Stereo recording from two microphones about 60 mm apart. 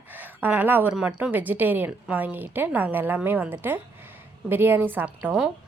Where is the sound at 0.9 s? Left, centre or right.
Centre.